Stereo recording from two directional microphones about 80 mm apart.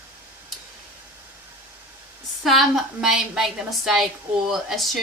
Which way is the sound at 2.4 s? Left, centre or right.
Centre.